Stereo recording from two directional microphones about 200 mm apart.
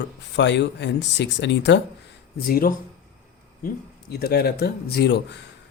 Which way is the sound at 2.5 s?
45° left (ahead or behind).